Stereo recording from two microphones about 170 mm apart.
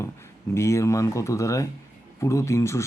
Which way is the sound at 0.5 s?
15° left (ahead or behind).